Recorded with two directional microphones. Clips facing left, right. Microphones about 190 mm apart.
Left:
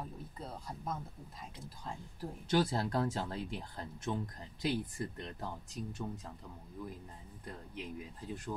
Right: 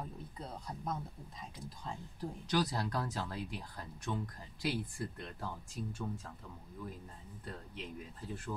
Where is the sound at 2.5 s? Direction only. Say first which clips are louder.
Left 3 dB; 25° left (ahead or behind).